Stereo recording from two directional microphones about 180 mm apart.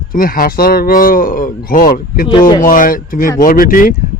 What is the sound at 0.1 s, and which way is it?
Speech, 50° left (ahead or behind).